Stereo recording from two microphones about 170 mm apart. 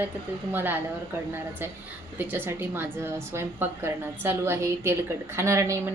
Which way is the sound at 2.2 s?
10° right (ahead or behind).